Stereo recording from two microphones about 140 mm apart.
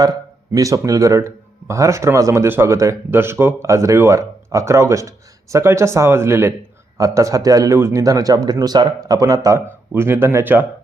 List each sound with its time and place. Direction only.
0.0 s speech: 25° right (ahead or behind)